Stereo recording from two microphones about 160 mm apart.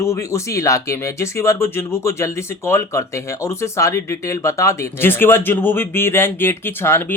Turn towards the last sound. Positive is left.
turn(degrees=15)  # may be behind; listen again after turning